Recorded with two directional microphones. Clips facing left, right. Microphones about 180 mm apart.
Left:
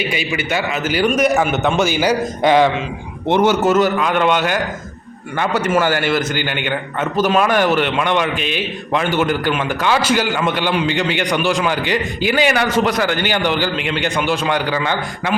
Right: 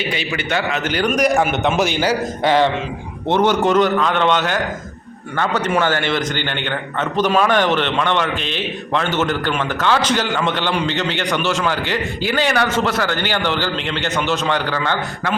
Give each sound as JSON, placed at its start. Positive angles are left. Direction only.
{"t": 0.1, "sound": "a man's voice", "side_deg": 10}
{"t": 2.0, "sound": "a man's voice", "side_deg": 15}